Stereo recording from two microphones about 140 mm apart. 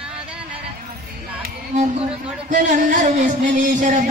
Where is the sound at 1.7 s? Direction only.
65° right (ahead or behind).